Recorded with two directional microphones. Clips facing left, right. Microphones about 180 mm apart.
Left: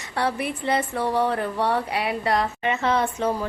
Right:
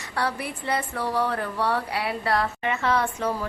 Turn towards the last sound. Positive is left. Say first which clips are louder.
# left 2 dB
turn(degrees=20)  # may be behind; listen again after turning